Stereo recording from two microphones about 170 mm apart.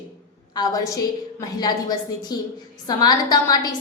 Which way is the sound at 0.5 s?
20° left (ahead or behind).